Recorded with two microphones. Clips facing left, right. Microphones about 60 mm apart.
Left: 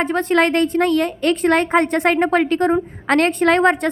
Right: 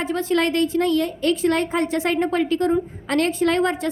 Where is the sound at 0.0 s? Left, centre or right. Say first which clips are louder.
Left 4 dB; left.